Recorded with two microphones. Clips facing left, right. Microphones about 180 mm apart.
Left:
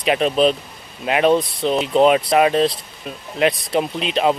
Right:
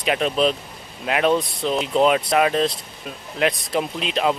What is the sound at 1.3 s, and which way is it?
Speech, 25° left (ahead or behind).